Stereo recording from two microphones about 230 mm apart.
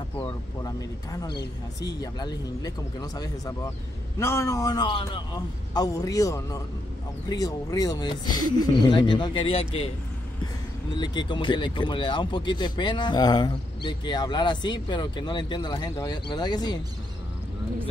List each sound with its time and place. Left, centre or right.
0.2 s a man's voice: centre
11.0 s speech: centre